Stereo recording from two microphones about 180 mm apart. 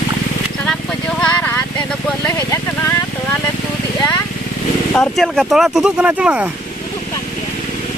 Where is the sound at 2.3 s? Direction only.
15° left (ahead or behind).